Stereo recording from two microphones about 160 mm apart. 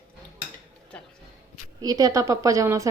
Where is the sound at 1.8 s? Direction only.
25° right (ahead or behind).